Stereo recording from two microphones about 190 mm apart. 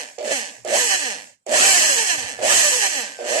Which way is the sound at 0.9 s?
20° right (ahead or behind).